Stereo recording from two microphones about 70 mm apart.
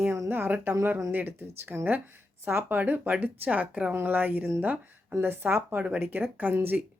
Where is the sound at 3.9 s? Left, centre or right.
Right.